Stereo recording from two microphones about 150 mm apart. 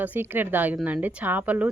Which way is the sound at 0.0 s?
10° right (ahead or behind).